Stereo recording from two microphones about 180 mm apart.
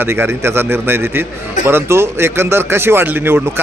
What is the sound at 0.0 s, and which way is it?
Speech, 15° right (ahead or behind).